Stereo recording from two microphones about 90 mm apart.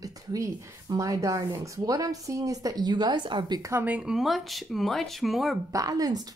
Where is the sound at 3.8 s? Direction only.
15° right (ahead or behind).